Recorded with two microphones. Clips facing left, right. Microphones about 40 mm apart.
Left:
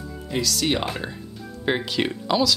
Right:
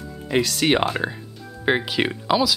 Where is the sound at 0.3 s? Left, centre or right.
Right.